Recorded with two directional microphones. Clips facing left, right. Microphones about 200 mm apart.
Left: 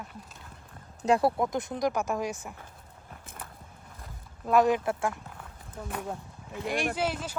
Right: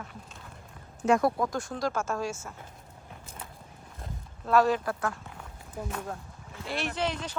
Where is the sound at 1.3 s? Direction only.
20° left (ahead or behind).